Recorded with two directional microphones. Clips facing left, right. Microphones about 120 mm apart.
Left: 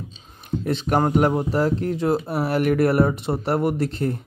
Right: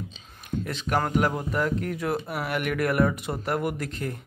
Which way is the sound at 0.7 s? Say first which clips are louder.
Left 7 dB; 35° left (ahead or behind).